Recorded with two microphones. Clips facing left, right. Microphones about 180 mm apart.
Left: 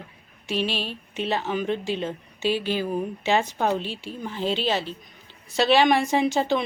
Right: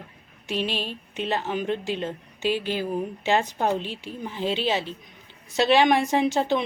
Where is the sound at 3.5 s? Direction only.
15° right (ahead or behind).